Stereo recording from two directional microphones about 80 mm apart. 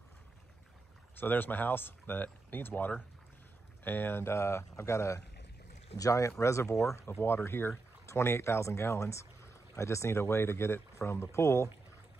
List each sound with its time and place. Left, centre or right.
1.1 s speech: left